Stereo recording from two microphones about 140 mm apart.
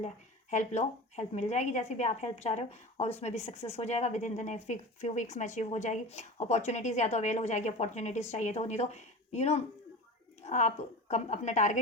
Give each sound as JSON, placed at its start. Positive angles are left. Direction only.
{"t": 0.5, "sound": "a woman's voice", "side_deg": 55}